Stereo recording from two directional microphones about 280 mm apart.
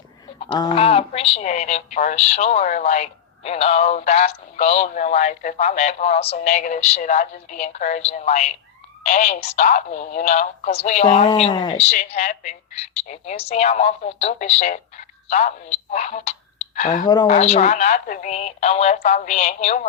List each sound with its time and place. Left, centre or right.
0.3 s a woman's voice: centre